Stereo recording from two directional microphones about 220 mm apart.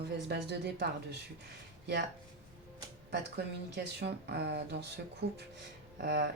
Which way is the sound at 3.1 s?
50° right (ahead or behind).